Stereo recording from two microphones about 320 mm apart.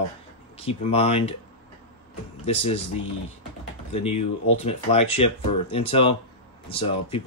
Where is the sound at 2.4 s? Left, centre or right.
Centre.